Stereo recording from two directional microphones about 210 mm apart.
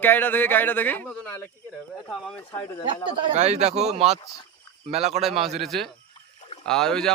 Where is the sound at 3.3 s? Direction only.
30° right (ahead or behind).